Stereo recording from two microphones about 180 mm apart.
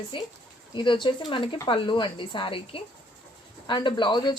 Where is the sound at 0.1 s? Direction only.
30° left (ahead or behind).